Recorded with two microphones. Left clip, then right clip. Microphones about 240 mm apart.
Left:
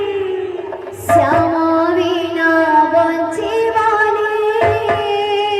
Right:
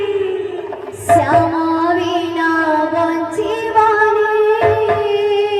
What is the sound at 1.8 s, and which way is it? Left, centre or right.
Child singing, left.